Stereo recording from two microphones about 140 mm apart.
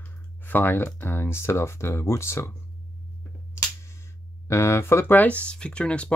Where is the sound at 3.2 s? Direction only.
20° left (ahead or behind).